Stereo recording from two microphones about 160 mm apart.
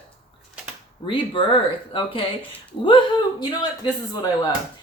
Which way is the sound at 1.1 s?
35° left (ahead or behind).